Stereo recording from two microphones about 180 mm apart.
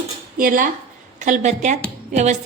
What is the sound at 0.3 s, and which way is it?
Speech, 50° right (ahead or behind).